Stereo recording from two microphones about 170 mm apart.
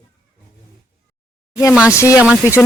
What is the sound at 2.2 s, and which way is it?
Speech, centre (ahead or behind).